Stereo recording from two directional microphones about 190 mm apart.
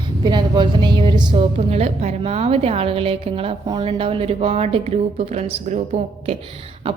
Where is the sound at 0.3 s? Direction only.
25° right (ahead or behind).